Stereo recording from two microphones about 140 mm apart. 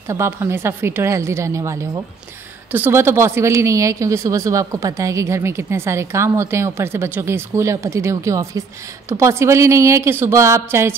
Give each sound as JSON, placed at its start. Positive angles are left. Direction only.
{"t": 0.1, "sound": "speech", "side_deg": -20}